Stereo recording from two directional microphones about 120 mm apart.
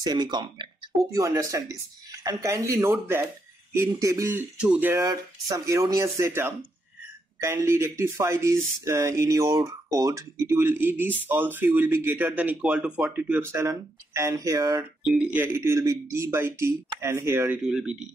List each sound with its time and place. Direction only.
0.0 s speech: 35° right (ahead or behind)
1.1 s speech: 25° right (ahead or behind)
4.9 s speech: 30° right (ahead or behind)
14.8 s speech: 10° right (ahead or behind)
17.6 s speech: 5° right (ahead or behind)